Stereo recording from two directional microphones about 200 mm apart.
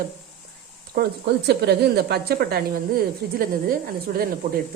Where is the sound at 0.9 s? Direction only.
50° right (ahead or behind).